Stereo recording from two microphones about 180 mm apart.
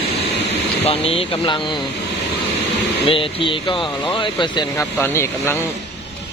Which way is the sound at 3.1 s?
30° left (ahead or behind).